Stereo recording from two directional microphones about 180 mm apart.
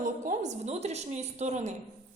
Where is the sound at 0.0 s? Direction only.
40° right (ahead or behind).